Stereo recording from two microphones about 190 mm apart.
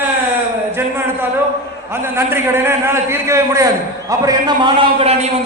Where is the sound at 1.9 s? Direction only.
10° right (ahead or behind).